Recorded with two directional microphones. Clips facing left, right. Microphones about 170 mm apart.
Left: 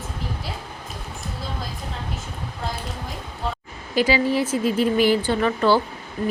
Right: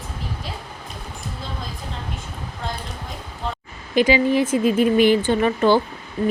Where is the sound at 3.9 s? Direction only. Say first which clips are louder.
Right 3 dB; 20° right (ahead or behind).